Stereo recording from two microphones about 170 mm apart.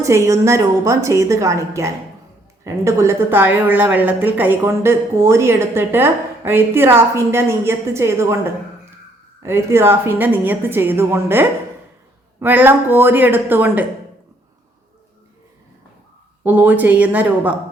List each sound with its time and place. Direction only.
0.0 s a woman's voice: 15° right (ahead or behind)
9.4 s a woman's voice: 15° right (ahead or behind)
16.4 s a woman's voice: 10° right (ahead or behind)